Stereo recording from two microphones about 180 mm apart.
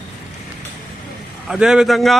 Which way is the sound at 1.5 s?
5° right (ahead or behind).